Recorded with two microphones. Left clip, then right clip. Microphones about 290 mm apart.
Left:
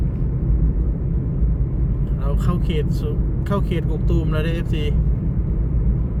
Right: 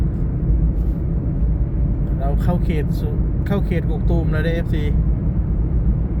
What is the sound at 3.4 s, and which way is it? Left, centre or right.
Speech, centre.